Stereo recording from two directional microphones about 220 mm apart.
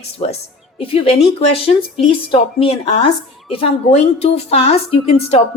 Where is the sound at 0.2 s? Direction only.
25° left (ahead or behind).